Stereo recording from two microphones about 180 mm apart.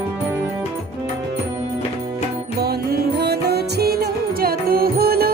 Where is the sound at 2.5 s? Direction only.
60° right (ahead or behind).